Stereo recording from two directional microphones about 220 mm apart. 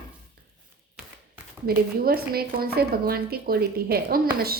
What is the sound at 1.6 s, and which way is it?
Speech, 45° right (ahead or behind).